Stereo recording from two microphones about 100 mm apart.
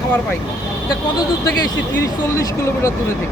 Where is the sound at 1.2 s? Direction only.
40° left (ahead or behind).